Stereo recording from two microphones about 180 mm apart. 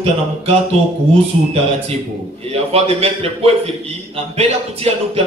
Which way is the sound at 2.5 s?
35° right (ahead or behind).